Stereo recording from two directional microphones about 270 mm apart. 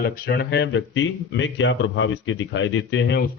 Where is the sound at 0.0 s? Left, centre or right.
Left.